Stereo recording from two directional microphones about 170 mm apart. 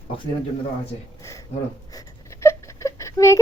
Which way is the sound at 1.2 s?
20° left (ahead or behind).